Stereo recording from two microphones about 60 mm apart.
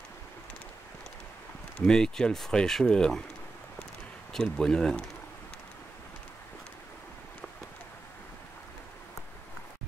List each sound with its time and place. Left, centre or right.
1.8 s speech: centre
4.3 s speech: centre